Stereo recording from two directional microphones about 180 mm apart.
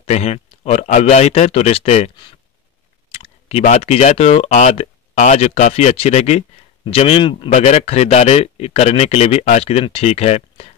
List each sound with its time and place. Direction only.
0.0 s speech: 35° left (ahead or behind)
3.1 s clicking: 35° left (ahead or behind)
3.6 s speech: 35° left (ahead or behind)